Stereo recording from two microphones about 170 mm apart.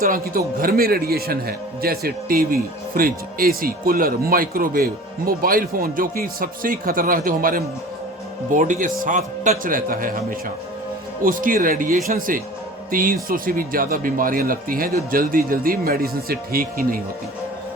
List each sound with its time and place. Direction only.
0.0 s a man's voice: 55° right (ahead or behind)
11.2 s speech: 55° right (ahead or behind)